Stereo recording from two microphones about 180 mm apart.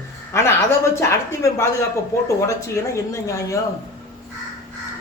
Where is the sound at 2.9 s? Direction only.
15° left (ahead or behind).